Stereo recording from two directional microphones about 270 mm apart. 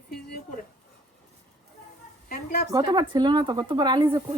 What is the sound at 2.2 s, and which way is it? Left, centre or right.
Speech, left.